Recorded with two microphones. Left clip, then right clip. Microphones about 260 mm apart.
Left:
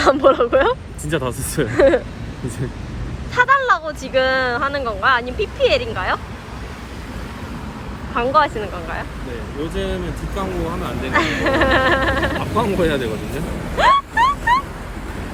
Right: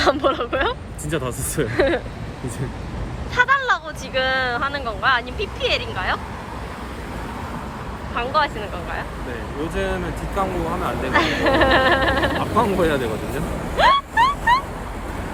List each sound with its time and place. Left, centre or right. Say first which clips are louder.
0.0 s speech: left 5 dB; centre
3.3 s speech: left 3 dB; centre
8.1 s speech: left 5 dB; centre
11.1 s speech: left 1 dB; centre
13.7 s a sound: left 1 dB; centre